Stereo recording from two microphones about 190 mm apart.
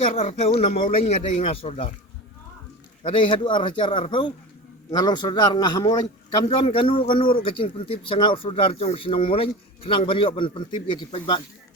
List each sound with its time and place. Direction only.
0.1 s speech: 35° left (ahead or behind)
3.0 s speech: 30° left (ahead or behind)